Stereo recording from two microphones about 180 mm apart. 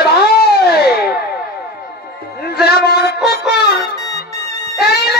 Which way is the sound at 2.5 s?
60° left (ahead or behind).